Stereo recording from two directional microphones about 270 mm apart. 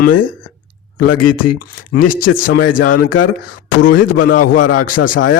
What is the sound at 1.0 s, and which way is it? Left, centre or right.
Speech, left.